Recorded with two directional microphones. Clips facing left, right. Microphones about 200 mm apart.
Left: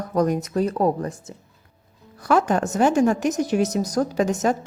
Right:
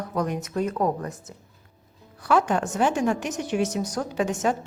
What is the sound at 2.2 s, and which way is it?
A woman's voice, 40° left (ahead or behind).